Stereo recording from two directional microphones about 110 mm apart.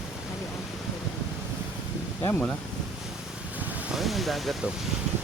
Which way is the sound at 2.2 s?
20° left (ahead or behind).